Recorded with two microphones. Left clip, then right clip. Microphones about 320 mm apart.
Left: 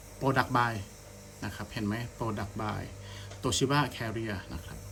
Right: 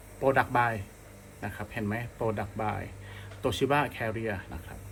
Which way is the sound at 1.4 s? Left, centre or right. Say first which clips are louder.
Right 2 dB; left.